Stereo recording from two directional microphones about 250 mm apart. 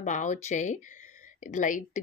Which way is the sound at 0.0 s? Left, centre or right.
Left.